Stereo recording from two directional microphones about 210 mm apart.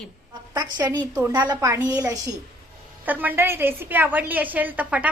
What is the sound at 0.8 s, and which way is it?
A woman's voice, 10° right (ahead or behind).